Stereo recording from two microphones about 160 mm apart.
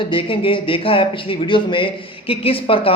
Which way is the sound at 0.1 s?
30° left (ahead or behind).